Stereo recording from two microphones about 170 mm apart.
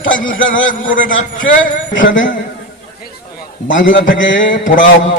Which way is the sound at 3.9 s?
90° left.